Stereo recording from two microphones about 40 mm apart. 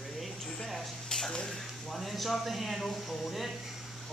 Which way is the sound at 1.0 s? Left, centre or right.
Centre.